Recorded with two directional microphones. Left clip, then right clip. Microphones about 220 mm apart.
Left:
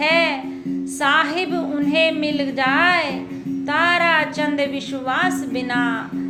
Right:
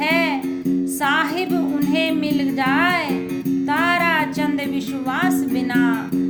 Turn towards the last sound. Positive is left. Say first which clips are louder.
# right 1 dB
turn(degrees=-20)  # may be behind; listen again after turning